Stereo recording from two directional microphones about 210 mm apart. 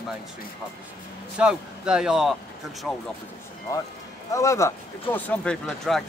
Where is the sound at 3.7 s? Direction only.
15° left (ahead or behind).